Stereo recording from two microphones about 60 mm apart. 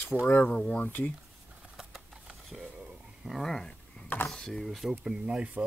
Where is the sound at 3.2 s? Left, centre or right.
Centre.